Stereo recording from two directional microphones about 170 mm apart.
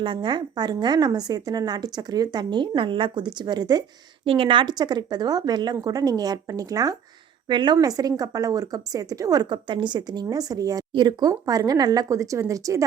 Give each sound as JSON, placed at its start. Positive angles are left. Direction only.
{"t": 0.0, "sound": "a woman's voice", "side_deg": -30}